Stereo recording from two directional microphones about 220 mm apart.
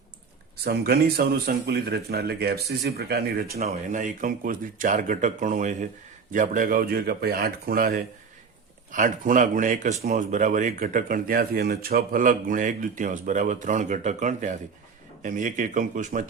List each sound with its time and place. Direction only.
0.5 s speech: 45° right (ahead or behind)